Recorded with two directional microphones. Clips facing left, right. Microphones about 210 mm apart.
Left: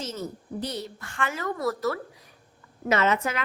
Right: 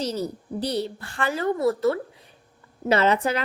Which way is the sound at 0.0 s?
35° right (ahead or behind).